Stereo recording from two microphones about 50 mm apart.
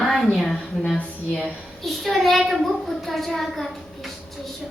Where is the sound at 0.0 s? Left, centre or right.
Centre.